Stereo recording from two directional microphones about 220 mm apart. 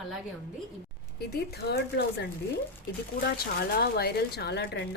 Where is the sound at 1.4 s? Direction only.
45° left (ahead or behind).